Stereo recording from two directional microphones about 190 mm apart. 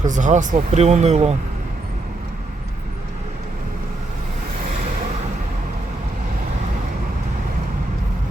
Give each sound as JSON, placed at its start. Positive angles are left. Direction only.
{"t": 0.0, "sound": "speech", "side_deg": -40}